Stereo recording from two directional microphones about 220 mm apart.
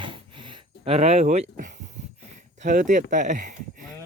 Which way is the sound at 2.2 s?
35° right (ahead or behind).